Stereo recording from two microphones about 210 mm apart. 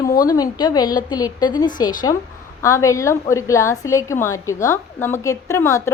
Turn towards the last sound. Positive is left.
turn(degrees=15)  # may be behind; listen again after turning